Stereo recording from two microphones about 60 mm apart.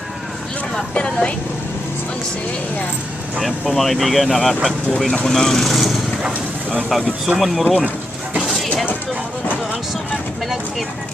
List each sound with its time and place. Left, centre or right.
0.9 s speech: centre
3.6 s speech: centre